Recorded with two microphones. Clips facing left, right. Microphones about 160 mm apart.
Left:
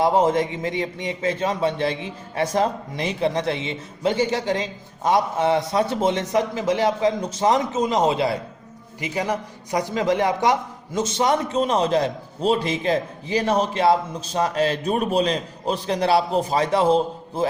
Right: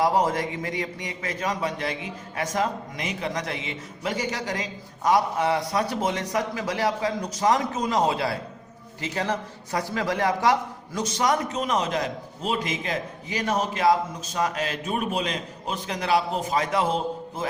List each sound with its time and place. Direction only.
0.0 s a man's voice: 25° left (ahead or behind)